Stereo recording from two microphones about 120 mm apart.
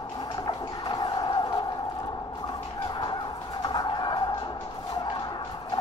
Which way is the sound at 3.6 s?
35° left (ahead or behind).